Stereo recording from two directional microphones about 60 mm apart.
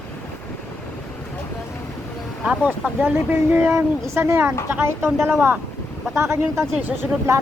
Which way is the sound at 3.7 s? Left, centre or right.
Right.